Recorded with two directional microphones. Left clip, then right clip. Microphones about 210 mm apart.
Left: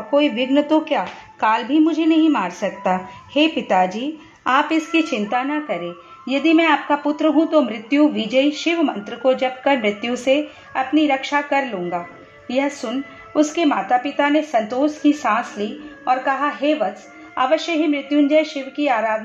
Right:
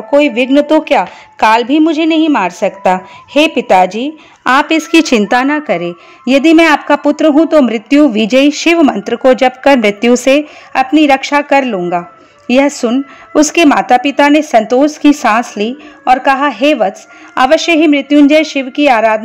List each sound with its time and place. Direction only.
0.1 s a woman's voice: 30° right (ahead or behind)
4.9 s a woman's voice: 55° right (ahead or behind)